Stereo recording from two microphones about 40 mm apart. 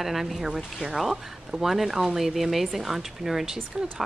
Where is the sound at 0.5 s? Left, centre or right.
Centre.